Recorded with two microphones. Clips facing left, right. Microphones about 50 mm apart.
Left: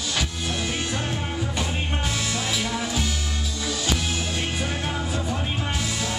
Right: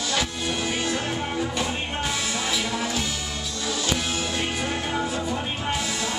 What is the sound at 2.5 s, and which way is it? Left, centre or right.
Music, centre.